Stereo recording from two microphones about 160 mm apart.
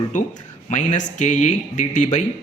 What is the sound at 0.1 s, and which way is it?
Speech, 50° left (ahead or behind).